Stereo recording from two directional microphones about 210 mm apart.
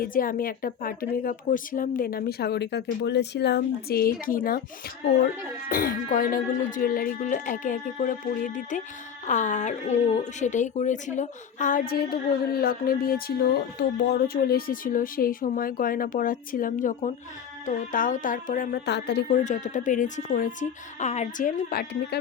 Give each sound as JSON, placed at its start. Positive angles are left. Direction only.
{"t": 0.0, "sound": "speech", "side_deg": 40}
{"t": 5.6, "sound": "speech", "side_deg": 45}
{"t": 19.3, "sound": "speech", "side_deg": 35}